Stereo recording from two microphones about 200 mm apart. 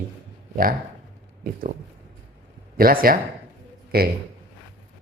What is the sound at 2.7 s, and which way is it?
A man's voice, 45° right (ahead or behind).